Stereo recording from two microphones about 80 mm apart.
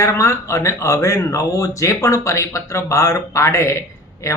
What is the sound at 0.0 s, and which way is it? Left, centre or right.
Speech, left.